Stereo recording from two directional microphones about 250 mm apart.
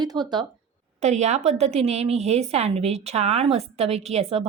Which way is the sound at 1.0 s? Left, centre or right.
Right.